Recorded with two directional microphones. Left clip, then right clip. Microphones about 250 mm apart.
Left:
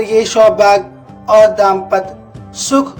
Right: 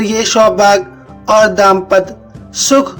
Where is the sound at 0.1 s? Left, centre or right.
Right.